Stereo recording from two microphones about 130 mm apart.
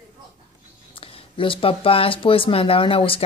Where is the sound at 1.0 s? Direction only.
45° left (ahead or behind).